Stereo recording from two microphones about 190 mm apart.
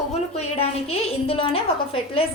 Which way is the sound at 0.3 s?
30° left (ahead or behind).